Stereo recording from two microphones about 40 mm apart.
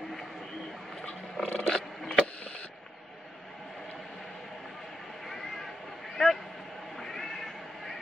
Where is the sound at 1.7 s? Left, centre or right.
Centre.